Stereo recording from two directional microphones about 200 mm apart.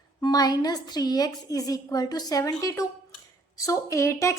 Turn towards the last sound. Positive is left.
turn(degrees=15)  # may be behind; listen again after turning